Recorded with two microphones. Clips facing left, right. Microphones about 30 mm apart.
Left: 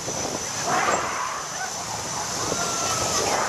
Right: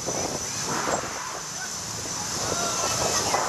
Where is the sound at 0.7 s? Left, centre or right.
Left.